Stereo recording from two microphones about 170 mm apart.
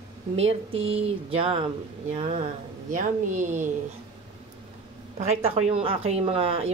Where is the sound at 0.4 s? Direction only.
35° right (ahead or behind).